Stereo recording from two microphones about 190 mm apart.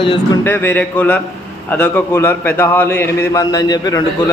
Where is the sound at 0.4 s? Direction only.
10° left (ahead or behind).